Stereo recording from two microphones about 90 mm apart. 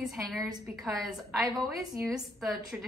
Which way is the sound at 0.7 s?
15° right (ahead or behind).